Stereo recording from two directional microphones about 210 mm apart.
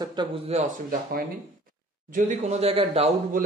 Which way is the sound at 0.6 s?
40° right (ahead or behind).